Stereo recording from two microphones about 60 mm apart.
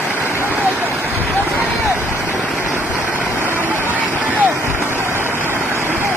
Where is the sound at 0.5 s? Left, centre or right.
Right.